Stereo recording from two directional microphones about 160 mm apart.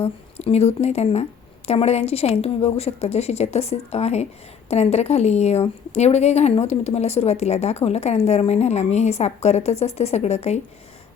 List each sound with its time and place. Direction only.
0.0 s a woman's voice: 40° left (ahead or behind)